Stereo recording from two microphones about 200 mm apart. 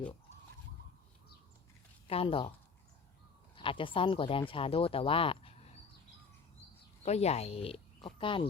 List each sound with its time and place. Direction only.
2.0 s speech: 25° left (ahead or behind)
3.5 s speech: 25° left (ahead or behind)
7.0 s speech: 30° left (ahead or behind)